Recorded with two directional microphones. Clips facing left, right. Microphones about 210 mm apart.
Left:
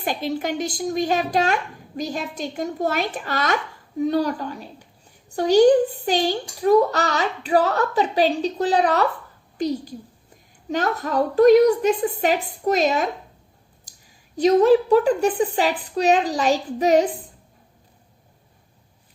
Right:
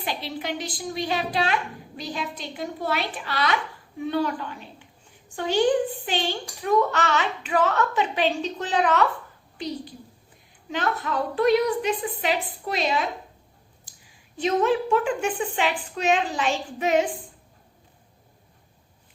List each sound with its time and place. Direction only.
0.0 s a woman's voice: 45° left (ahead or behind)
14.3 s a woman's voice: 40° left (ahead or behind)